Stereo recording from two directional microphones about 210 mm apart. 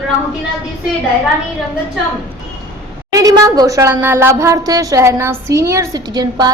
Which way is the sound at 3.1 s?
15° right (ahead or behind).